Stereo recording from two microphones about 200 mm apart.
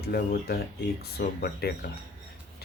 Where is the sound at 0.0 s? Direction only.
50° left (ahead or behind).